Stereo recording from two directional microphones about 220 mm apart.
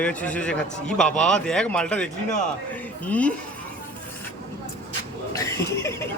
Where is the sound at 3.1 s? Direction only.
5° left (ahead or behind).